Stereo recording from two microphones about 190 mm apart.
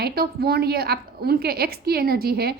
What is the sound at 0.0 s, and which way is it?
A woman's voice, 55° right (ahead or behind).